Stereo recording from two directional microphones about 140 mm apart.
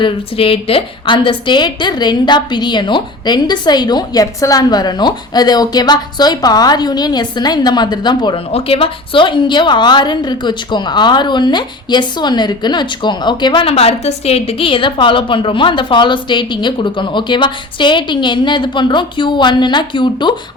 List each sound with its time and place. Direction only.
0.0 s a woman's voice: 40° left (ahead or behind)